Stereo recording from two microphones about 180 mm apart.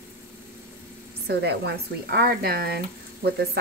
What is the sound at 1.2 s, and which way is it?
Speech, 65° right (ahead or behind).